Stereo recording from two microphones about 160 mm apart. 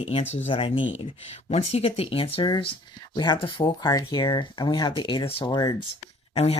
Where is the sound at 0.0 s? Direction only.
40° left (ahead or behind).